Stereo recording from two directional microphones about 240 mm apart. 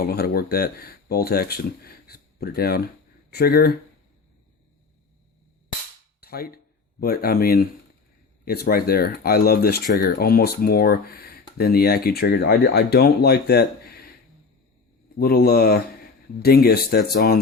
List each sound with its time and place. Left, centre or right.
0.0 s speech: left
6.1 s a sound: left
7.0 s speech: left
15.2 s speech: left